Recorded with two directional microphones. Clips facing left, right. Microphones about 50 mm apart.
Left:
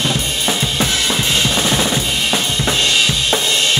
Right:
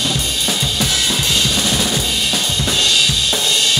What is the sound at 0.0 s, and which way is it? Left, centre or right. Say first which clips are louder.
Drum kit: left 2 dB; left.